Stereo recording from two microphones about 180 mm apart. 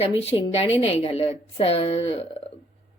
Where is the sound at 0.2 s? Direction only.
35° left (ahead or behind).